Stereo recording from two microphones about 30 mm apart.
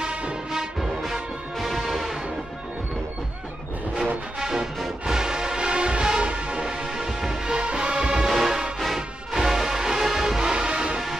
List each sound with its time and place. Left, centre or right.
0.1 s music: right
1.6 s music: centre
4.4 s music: centre
6.3 s music: right
6.8 s music: centre
7.4 s music: right
8.3 s music: centre
9.3 s music: centre
10.4 s music: right